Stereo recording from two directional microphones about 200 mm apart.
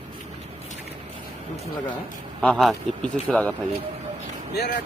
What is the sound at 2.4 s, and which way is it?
Speech, centre (ahead or behind).